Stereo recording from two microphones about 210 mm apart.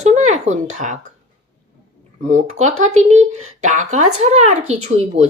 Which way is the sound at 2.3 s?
35° right (ahead or behind).